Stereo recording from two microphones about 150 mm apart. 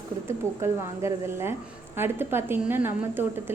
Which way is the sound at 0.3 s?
15° right (ahead or behind).